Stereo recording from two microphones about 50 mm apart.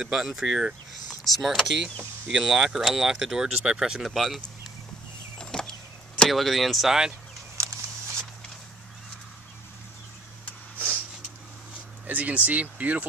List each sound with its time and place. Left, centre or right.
0.0 s speech: centre
4.1 s speech: centre
5.4 s a sound: centre
6.2 s speech: centre
7.5 s a sound: right
12.1 s speech: right